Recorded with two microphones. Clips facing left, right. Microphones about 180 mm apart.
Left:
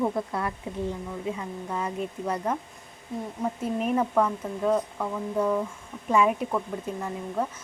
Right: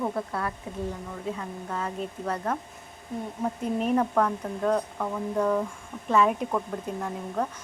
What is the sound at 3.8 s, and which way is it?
Speech, 5° left (ahead or behind).